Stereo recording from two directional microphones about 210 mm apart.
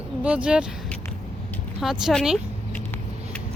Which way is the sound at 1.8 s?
Centre (ahead or behind).